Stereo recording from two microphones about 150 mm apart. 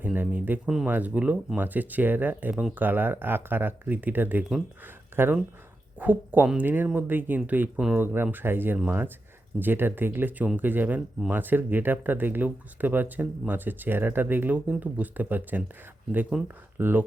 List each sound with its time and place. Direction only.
0.0 s speech: 10° right (ahead or behind)